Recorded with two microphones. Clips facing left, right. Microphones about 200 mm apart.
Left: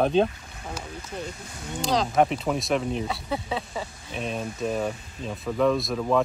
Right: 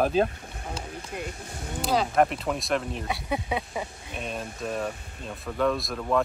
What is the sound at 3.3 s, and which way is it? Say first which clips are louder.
Speech: even; 15° right (ahead or behind).